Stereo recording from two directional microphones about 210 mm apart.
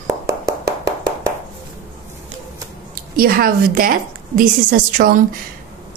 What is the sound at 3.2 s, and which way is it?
A woman's voice, 45° right (ahead or behind).